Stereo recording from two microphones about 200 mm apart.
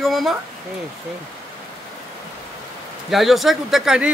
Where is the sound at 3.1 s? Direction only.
Centre (ahead or behind).